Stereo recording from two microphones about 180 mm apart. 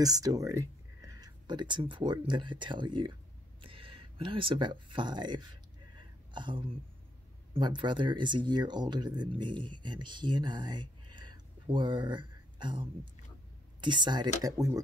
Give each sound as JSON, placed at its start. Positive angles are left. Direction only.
{"t": 0.0, "sound": "speech", "side_deg": -20}